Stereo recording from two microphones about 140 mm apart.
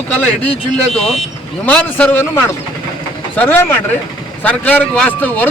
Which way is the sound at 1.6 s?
10° left (ahead or behind).